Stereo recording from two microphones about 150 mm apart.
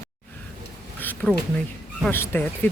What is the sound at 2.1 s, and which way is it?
Speech, 15° left (ahead or behind).